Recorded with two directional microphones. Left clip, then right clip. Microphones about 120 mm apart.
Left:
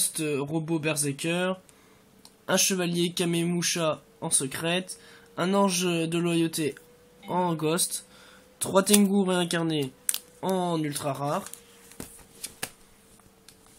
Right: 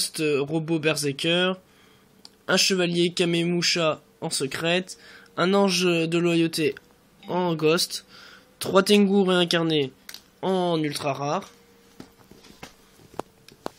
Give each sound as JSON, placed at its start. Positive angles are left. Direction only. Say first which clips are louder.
{"t": 0.0, "sound": "speech", "louder": "right 5 dB", "side_deg": -20}